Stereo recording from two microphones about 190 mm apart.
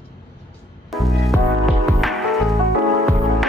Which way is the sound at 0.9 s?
Centre (ahead or behind).